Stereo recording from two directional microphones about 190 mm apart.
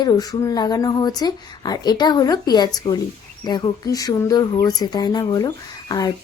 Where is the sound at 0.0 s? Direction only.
20° left (ahead or behind).